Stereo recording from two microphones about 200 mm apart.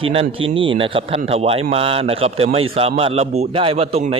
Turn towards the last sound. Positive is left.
turn(degrees=-30)  # may be behind; listen again after turning